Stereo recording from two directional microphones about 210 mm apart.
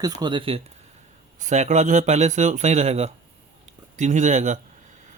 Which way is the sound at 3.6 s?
35° right (ahead or behind).